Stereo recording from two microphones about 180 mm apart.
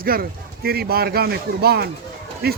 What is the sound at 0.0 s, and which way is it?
Speech, 55° right (ahead or behind).